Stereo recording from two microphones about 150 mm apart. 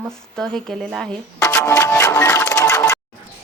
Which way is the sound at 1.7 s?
20° left (ahead or behind).